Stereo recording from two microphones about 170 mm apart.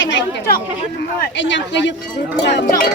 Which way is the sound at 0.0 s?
90° left.